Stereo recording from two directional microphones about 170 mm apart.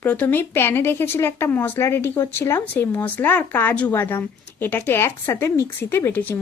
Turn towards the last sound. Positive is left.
turn(degrees=10)  # may be behind; listen again after turning